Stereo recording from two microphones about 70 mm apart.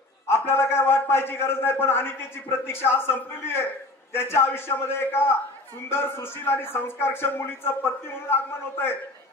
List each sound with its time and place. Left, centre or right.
0.3 s a man's voice: left